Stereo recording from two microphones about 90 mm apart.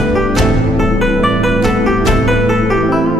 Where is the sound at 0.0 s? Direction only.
Centre (ahead or behind).